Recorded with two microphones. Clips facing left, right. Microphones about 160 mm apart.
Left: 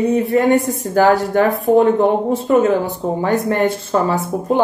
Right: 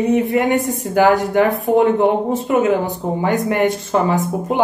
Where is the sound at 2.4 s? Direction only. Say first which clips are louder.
Left 2 dB; 15° right (ahead or behind).